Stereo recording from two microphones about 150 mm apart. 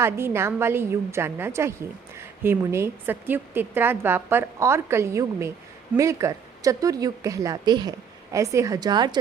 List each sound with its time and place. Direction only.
0.0 s a woman's voice: 15° right (ahead or behind)